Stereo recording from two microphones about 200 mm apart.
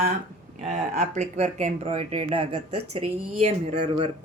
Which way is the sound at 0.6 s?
35° right (ahead or behind).